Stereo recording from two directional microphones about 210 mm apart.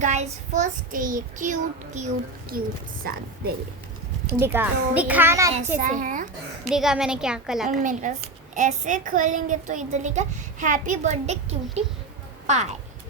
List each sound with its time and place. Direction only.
0.0 s a woman's voice: 35° right (ahead or behind)
4.3 s a child's voice: 10° right (ahead or behind)
5.7 s a woman's voice: 35° right (ahead or behind)
6.7 s a woman's voice: centre (ahead or behind)
7.7 s a woman's voice: 35° right (ahead or behind)